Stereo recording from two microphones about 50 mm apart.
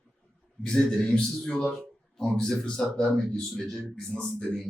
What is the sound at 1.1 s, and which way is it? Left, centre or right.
A man's voice, centre.